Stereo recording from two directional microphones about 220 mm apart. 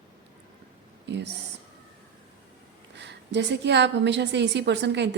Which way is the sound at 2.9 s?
50° right (ahead or behind).